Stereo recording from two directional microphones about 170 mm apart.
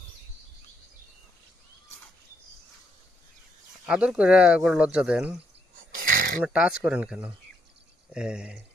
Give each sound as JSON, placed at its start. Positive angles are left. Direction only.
{"t": 3.8, "sound": "speech", "side_deg": -5}
{"t": 6.0, "sound": "a sound", "side_deg": -55}
{"t": 6.4, "sound": "speech", "side_deg": -5}